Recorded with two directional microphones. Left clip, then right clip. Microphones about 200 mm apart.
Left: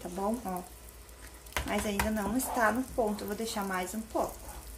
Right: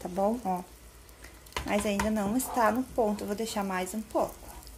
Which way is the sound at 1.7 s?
30° right (ahead or behind).